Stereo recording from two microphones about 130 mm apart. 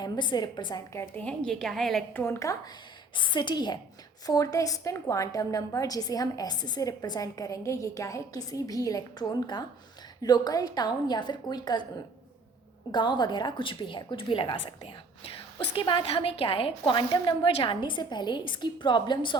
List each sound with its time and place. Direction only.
0.0 s a woman's voice: 35° left (ahead or behind)
0.9 s a woman's voice: 10° left (ahead or behind)
2.1 s a woman's voice: 20° left (ahead or behind)
3.2 s a woman's voice: 35° left (ahead or behind)
12.9 s a woman's voice: 35° left (ahead or behind)